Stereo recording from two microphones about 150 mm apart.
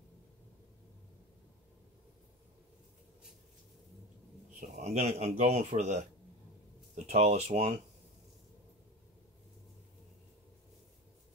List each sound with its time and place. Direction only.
4.6 s a man's voice: 50° right (ahead or behind)
7.1 s a man's voice: 45° right (ahead or behind)